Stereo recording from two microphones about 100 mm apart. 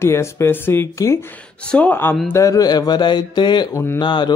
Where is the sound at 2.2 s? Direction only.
30° left (ahead or behind); by 3.6 s 50° left (ahead or behind).